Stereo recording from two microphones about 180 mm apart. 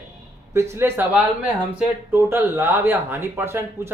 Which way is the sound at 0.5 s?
15° right (ahead or behind).